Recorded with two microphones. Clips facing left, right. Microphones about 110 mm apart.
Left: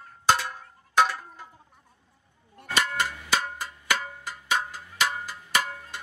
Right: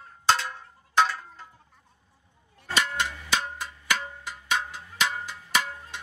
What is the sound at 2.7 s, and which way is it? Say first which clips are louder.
Cowbell: left 1 dB; 5° left (ahead or behind).